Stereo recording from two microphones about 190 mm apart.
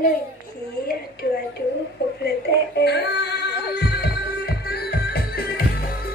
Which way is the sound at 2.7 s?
60° left (ahead or behind).